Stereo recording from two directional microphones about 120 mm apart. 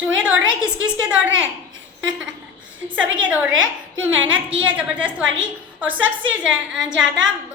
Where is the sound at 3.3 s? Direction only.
10° right (ahead or behind).